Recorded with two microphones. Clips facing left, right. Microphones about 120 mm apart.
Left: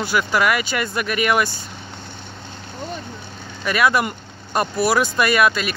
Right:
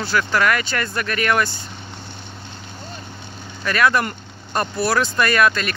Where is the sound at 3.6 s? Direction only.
10° left (ahead or behind).